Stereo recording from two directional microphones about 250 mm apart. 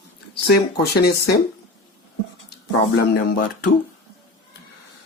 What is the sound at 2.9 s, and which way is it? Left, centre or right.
Speech, left.